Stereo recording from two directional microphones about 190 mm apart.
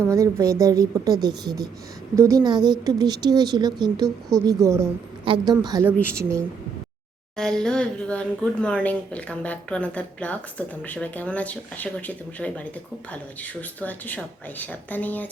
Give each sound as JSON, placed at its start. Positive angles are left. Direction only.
{"t": 0.0, "sound": "a woman's voice", "side_deg": -15}
{"t": 7.3, "sound": "a woman's voice", "side_deg": 5}